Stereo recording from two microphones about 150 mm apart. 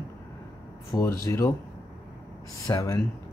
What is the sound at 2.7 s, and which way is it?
Speech, 20° left (ahead or behind).